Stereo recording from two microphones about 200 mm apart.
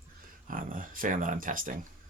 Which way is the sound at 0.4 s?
45° right (ahead or behind).